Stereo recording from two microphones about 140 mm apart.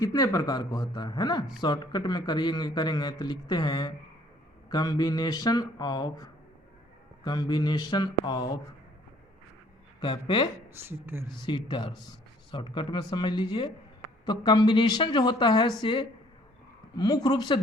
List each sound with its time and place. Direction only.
0.0 s a man's voice: 25° left (ahead or behind)
10.0 s a man's voice: 35° left (ahead or behind)
10.8 s speech: 15° right (ahead or behind)
11.4 s a man's voice: 35° left (ahead or behind)